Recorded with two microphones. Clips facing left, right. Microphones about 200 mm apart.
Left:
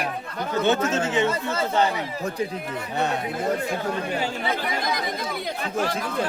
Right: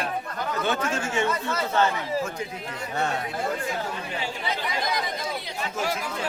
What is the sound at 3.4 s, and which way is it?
Speech, 45° left (ahead or behind).